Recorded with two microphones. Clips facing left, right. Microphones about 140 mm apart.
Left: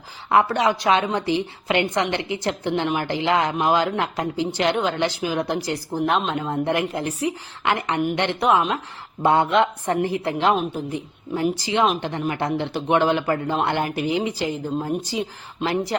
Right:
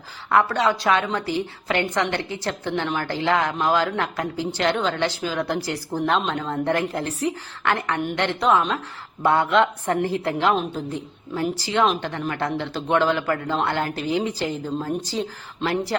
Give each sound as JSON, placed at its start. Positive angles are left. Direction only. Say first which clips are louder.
{"t": 0.3, "sound": "a woman's voice", "louder": "left 1 dB", "side_deg": 20}